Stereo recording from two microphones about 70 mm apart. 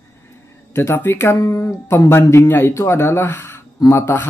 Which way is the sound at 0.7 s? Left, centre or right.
Left.